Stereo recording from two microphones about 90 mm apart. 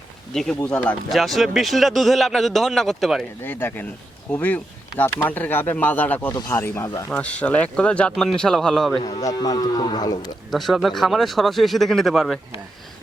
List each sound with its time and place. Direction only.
0.3 s speech: 10° left (ahead or behind)
1.1 s a man's voice: centre (ahead or behind)
3.4 s speech: 25° left (ahead or behind)
7.1 s a man's voice: 15° left (ahead or behind)
9.0 s speech: 50° left (ahead or behind)
10.5 s a man's voice: centre (ahead or behind)